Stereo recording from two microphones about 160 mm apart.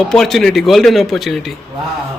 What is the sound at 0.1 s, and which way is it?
Speech, centre (ahead or behind).